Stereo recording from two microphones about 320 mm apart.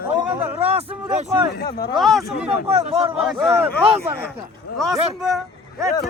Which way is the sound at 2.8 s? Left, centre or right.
Centre.